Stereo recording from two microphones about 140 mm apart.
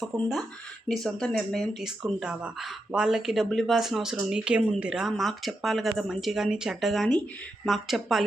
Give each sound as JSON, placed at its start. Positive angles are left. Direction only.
{"t": 0.0, "sound": "speech", "side_deg": 0}